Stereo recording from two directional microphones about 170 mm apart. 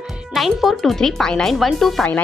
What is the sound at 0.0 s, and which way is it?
Speech, 5° right (ahead or behind).